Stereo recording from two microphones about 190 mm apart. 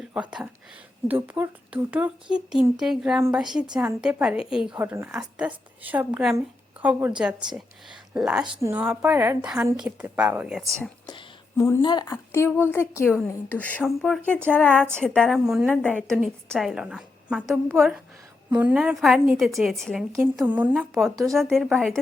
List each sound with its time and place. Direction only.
0.1 s a woman's voice: 5° right (ahead or behind)
11.0 s a sound: 25° left (ahead or behind)
11.5 s a woman's voice: 15° left (ahead or behind)